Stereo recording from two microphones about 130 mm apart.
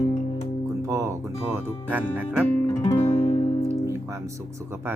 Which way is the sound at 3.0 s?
45° left (ahead or behind).